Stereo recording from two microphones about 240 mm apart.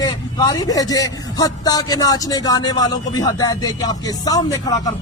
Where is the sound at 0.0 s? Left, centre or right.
Centre.